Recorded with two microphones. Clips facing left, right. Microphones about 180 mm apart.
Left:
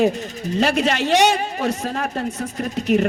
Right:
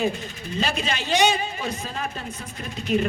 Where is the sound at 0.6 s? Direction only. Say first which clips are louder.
Left 8 dB; 75° left (ahead or behind).